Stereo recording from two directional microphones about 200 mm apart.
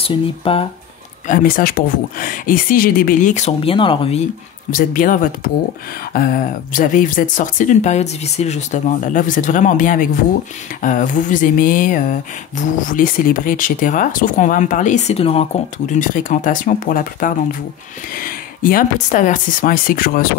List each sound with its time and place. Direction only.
0.0 s speech: 30° left (ahead or behind)
1.2 s speech: 45° left (ahead or behind); by 4.2 s 25° left (ahead or behind)
4.6 s speech: 45° left (ahead or behind)
15.9 s speech: 40° left (ahead or behind)